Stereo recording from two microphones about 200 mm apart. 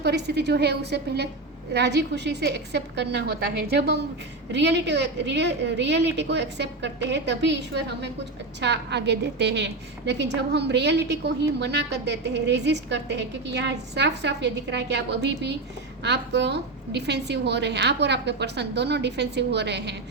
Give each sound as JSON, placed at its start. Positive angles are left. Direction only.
{"t": 0.0, "sound": "a woman's voice", "side_deg": -55}